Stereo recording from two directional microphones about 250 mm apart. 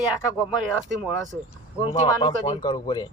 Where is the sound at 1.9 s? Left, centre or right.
Centre.